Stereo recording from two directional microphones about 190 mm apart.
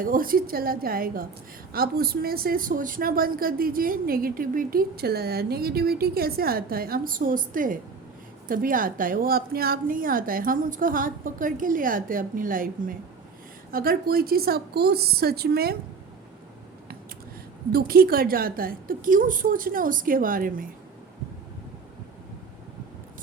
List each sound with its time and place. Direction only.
0.0 s a woman's voice: 50° right (ahead or behind)
17.7 s a woman's voice: 55° right (ahead or behind)